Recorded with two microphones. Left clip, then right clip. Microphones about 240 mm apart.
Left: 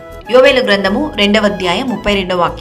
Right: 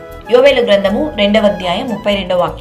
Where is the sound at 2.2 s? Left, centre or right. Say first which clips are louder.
Even; left.